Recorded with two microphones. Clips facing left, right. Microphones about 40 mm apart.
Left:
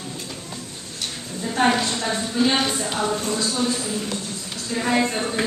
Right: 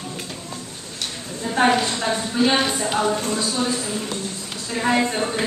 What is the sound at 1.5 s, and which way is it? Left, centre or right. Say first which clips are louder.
A woman's voice: right 2 dB; centre.